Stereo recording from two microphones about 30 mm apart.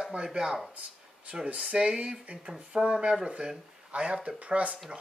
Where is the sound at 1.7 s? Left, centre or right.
Centre.